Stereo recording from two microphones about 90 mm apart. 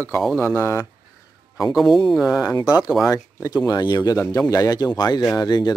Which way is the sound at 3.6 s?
50° left (ahead or behind).